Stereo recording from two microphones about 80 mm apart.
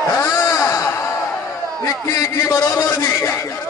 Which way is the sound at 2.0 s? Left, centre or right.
Left.